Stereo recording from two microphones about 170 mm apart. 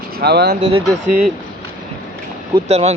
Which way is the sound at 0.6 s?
40° right (ahead or behind).